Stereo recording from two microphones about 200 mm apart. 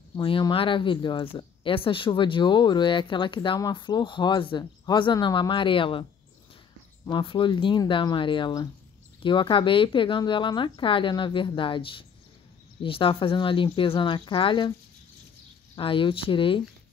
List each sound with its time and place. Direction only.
0.2 s speech: 25° left (ahead or behind)
7.1 s speech: 25° left (ahead or behind)
15.7 s speech: 25° left (ahead or behind)